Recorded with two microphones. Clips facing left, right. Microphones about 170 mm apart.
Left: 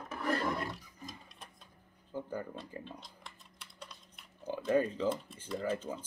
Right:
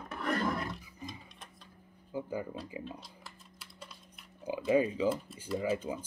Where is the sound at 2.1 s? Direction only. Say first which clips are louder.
Right 3 dB; 10° right (ahead or behind).